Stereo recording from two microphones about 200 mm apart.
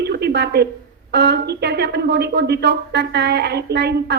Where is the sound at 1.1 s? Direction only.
55° right (ahead or behind).